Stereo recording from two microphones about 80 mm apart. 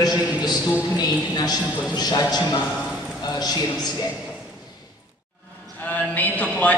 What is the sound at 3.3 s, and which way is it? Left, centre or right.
Speech, left.